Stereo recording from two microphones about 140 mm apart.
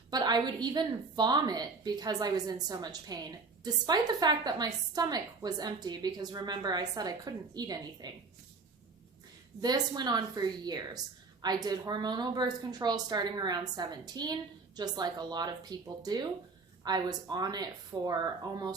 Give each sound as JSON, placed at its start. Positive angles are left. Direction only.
{"t": 0.1, "sound": "a woman's voice", "side_deg": -30}
{"t": 9.6, "sound": "a woman's voice", "side_deg": -30}